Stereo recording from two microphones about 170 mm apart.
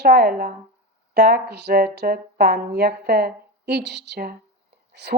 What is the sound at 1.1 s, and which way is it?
A woman's voice, 70° right (ahead or behind).